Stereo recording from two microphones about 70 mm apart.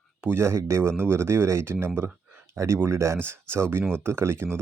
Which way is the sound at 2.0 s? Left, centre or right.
Right.